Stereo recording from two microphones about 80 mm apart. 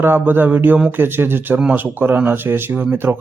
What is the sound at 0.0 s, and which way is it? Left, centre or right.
Speech, right.